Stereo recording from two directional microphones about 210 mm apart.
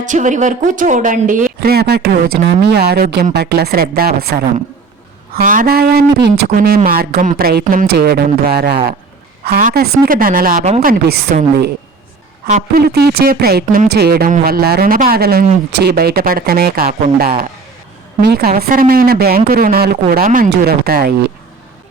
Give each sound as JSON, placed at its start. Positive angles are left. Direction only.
{"t": 0.0, "sound": "a woman's voice", "side_deg": -35}
{"t": 12.5, "sound": "a woman's voice", "side_deg": -35}
{"t": 12.8, "sound": "speech", "side_deg": -50}